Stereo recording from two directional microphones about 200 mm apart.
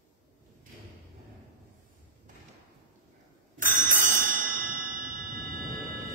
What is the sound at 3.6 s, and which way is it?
Music, 40° right (ahead or behind).